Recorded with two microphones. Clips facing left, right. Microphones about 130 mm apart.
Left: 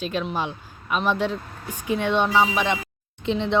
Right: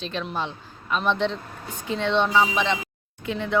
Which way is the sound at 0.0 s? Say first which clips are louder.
Left 3 dB; 10° left (ahead or behind).